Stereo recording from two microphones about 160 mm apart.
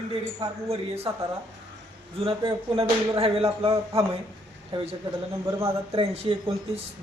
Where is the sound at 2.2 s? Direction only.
35° right (ahead or behind).